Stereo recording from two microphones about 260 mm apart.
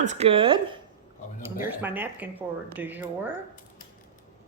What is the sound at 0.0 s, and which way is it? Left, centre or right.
Speech, right.